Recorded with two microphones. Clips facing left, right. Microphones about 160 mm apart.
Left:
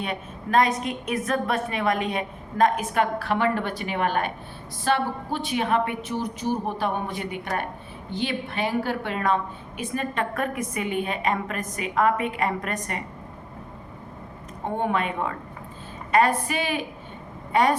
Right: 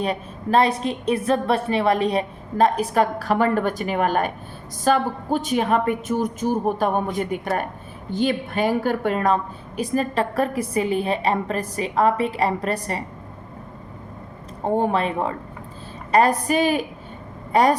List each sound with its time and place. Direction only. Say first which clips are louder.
0.0 s a woman's voice: right 6 dB; 35° right (ahead or behind)
14.8 s a woman's voice: right 3 dB; 35° right (ahead or behind)